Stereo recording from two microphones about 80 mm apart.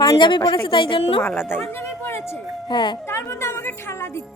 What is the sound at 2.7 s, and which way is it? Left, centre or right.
Speech, left.